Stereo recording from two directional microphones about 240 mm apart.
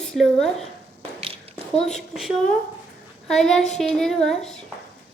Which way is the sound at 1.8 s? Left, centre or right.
Centre.